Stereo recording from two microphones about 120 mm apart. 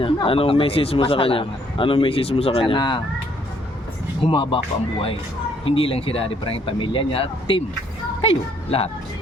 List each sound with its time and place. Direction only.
0.0 s a man's voice: 50° left (ahead or behind)
4.2 s a man's voice: 45° left (ahead or behind)